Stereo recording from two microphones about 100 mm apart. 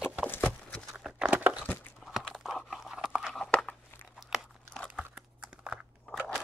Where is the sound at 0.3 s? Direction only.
20° left (ahead or behind).